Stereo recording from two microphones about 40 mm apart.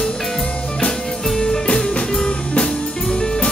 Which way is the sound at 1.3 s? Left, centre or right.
Centre.